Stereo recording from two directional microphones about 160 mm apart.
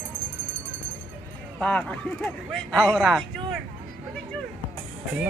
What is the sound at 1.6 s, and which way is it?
Speech, 5° left (ahead or behind).